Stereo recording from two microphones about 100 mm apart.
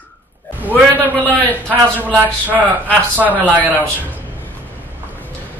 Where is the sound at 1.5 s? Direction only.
20° right (ahead or behind).